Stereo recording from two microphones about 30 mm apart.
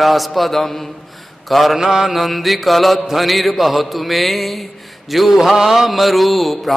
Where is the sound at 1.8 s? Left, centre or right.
Centre.